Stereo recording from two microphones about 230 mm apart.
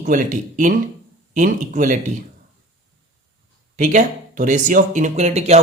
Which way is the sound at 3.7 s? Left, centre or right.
Right.